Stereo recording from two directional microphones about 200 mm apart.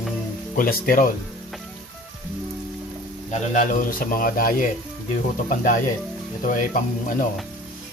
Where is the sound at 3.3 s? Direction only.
40° left (ahead or behind).